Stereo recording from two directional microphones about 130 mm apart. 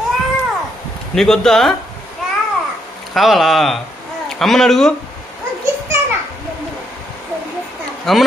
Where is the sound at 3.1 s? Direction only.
Centre (ahead or behind).